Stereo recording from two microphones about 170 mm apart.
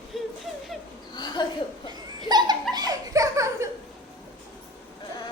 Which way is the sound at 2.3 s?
25° right (ahead or behind).